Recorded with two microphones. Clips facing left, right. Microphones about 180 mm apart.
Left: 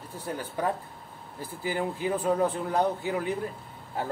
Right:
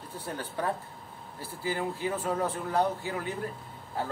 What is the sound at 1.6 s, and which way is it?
Speech, 15° left (ahead or behind).